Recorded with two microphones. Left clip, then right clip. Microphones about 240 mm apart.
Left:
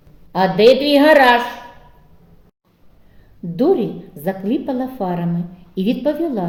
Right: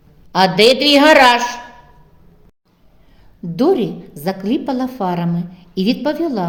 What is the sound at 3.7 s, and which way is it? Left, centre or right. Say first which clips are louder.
A woman's voice: right 1 dB; right.